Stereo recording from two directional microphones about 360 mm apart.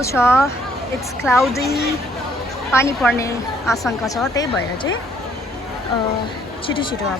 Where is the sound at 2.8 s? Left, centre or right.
Centre.